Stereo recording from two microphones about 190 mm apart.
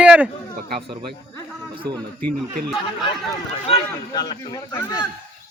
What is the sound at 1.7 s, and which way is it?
Speech, 25° right (ahead or behind).